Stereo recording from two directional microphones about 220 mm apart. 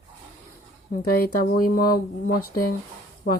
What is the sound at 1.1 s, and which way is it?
Speech, 45° left (ahead or behind).